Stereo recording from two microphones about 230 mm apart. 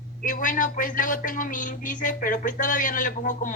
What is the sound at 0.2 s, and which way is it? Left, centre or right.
A man's voice, left.